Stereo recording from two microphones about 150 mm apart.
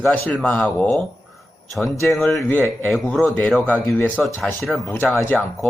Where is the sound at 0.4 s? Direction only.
5° left (ahead or behind).